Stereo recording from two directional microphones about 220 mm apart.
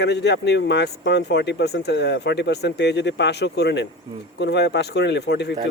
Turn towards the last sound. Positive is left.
turn(degrees=50)  # may be behind; listen again after turning